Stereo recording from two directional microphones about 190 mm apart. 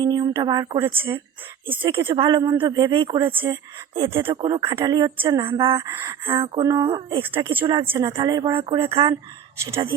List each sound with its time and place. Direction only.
0.0 s speech: 20° right (ahead or behind)
5.4 s speech: 25° right (ahead or behind)
9.6 s speech: 15° right (ahead or behind)